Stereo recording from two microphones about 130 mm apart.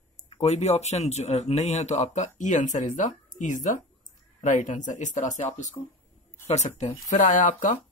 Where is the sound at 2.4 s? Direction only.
70° left (ahead or behind).